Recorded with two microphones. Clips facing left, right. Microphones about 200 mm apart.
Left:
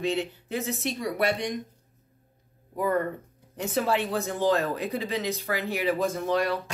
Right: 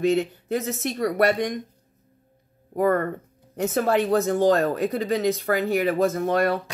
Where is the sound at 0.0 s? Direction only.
45° right (ahead or behind).